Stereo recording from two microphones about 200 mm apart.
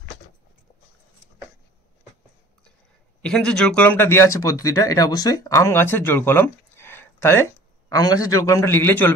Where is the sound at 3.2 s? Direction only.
5° left (ahead or behind).